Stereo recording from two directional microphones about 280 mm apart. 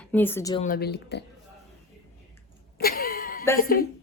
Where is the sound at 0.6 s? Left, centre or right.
Left.